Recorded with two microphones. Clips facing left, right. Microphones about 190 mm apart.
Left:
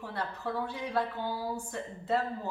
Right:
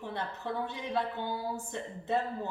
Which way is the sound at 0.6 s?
25° right (ahead or behind).